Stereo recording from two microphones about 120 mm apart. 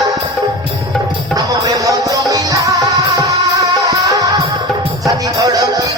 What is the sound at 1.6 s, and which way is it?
Music, 30° right (ahead or behind).